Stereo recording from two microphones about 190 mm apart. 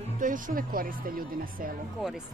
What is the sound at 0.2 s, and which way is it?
Speech, 45° right (ahead or behind).